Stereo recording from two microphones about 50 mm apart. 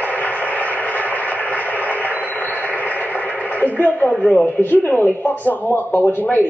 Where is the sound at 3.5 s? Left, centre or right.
Left.